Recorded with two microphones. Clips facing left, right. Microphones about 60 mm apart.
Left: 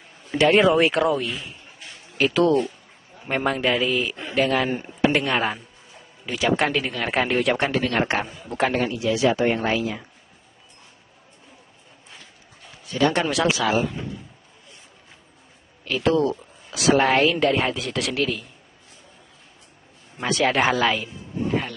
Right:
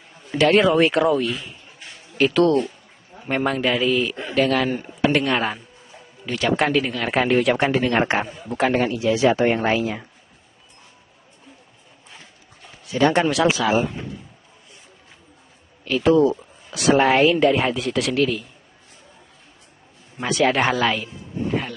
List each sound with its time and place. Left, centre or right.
0.4 s a man's voice: centre
7.9 s a man's voice: right
8.5 s a man's voice: centre
9.0 s a man's voice: right
12.9 s a man's voice: right
13.3 s a man's voice: centre
15.8 s a man's voice: centre
20.2 s a man's voice: centre